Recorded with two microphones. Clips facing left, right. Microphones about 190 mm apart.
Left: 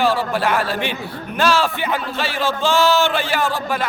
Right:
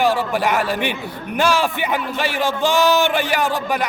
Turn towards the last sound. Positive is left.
turn(degrees=-15)  # may be behind; listen again after turning